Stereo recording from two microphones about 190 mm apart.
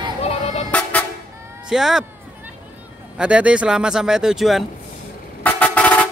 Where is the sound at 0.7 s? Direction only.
10° left (ahead or behind).